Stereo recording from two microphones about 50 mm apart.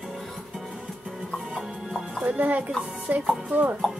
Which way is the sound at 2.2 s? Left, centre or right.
Right.